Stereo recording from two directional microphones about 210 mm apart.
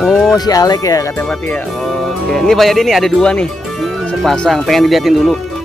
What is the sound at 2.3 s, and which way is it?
Speech, centre (ahead or behind).